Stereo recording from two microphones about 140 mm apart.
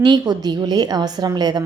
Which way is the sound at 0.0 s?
30° right (ahead or behind).